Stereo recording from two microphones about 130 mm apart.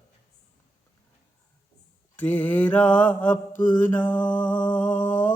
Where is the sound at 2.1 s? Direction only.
10° left (ahead or behind).